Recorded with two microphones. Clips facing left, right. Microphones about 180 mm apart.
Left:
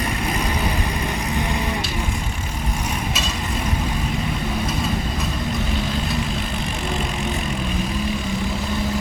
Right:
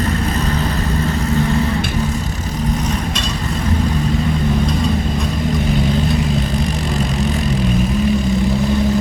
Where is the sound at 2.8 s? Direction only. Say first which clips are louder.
Right 5 dB; 5° left (ahead or behind).